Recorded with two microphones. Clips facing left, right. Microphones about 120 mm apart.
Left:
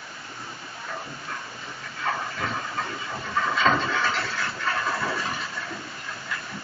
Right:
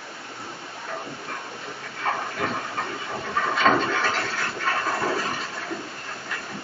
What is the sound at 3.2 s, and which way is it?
Toilet flush, 55° right (ahead or behind).